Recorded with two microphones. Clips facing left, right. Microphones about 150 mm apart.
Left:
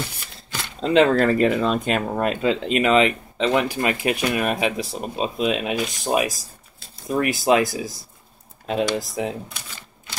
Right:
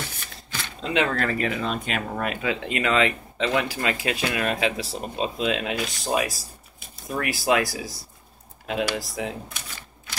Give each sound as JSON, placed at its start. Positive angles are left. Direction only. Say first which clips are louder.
{"t": 0.8, "sound": "speech", "louder": "left 8 dB", "side_deg": 30}
{"t": 2.6, "sound": "speech", "louder": "left 4 dB", "side_deg": 20}